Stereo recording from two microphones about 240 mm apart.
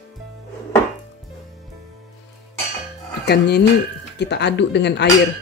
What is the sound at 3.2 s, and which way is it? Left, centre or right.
Speech, left.